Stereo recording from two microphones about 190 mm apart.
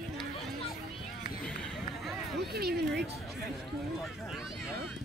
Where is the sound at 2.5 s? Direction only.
55° right (ahead or behind).